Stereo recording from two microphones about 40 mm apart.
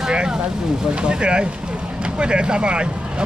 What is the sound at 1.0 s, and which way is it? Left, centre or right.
Speech, right.